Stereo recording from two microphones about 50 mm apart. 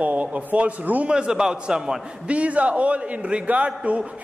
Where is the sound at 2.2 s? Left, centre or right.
Right.